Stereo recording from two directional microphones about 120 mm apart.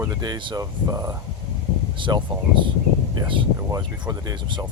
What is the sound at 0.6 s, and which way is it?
Speech, 30° right (ahead or behind).